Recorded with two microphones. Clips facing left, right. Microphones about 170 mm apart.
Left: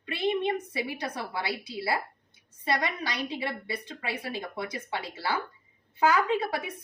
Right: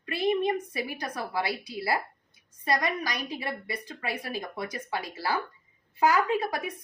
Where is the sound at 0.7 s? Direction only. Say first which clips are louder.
Left 1 dB; 25° left (ahead or behind).